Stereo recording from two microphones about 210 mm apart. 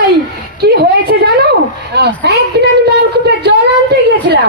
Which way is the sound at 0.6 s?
45° right (ahead or behind).